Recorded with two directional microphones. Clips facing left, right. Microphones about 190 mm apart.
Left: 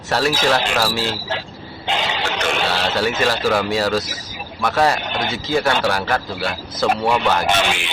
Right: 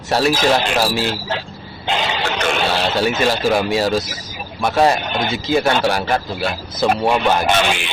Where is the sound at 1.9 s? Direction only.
50° right (ahead or behind).